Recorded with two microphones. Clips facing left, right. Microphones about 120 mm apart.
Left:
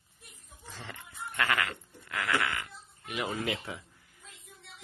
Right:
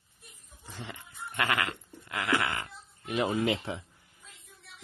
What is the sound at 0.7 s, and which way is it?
Goat, 15° right (ahead or behind).